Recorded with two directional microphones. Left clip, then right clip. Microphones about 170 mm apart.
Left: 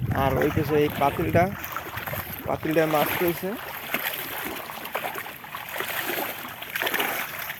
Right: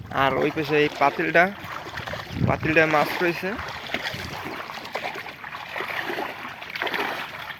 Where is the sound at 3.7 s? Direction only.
5° right (ahead or behind).